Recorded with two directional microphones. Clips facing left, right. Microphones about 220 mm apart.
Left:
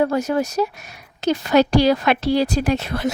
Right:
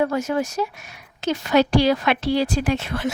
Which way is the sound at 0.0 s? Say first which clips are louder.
Left 2 dB; 35° left (ahead or behind).